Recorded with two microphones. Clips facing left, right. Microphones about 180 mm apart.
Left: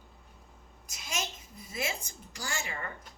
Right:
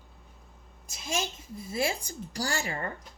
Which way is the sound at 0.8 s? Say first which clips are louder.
Right 5 dB; 30° right (ahead or behind).